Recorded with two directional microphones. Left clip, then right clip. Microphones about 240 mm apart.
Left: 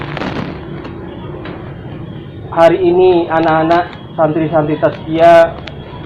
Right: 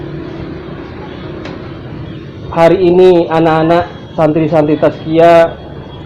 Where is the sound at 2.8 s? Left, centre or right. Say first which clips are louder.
Right 3 dB; right.